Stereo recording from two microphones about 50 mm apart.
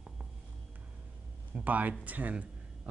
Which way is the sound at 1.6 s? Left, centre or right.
Right.